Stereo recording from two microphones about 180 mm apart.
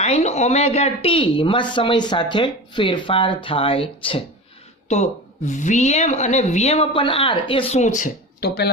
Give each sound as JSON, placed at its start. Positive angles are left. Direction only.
{"t": 0.0, "sound": "speech", "side_deg": 35}
{"t": 8.4, "sound": "speech", "side_deg": 60}